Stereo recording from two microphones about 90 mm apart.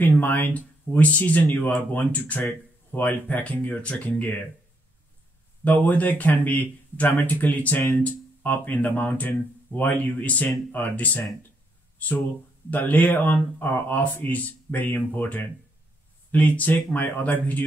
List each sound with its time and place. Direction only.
0.0 s speech: 20° left (ahead or behind)
5.6 s speech: 20° left (ahead or behind)
12.7 s speech: 20° left (ahead or behind)